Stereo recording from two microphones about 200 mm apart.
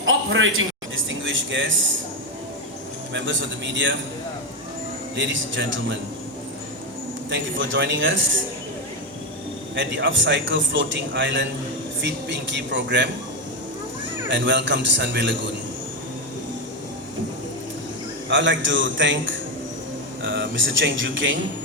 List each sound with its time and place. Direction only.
0.0 s a sound: 75° right (ahead or behind)
3.1 s a man's voice: 65° right (ahead or behind)
5.1 s a man's voice: 70° right (ahead or behind)
7.3 s a man's voice: 70° right (ahead or behind)
9.7 s a man's voice: 65° right (ahead or behind)
14.3 s a man's voice: 65° right (ahead or behind)
18.3 s a man's voice: 65° right (ahead or behind)